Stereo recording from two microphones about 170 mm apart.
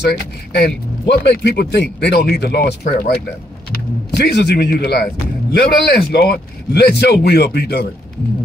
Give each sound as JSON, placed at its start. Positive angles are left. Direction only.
{"t": 0.1, "sound": "a man's voice", "side_deg": 85}
{"t": 4.2, "sound": "a man's voice", "side_deg": 80}